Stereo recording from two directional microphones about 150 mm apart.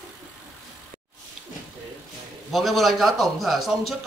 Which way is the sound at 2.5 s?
Centre (ahead or behind).